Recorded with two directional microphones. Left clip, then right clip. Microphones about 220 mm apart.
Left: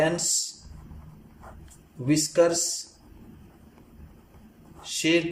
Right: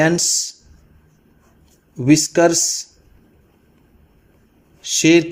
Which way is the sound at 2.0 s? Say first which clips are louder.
Right 8 dB; 45° right (ahead or behind).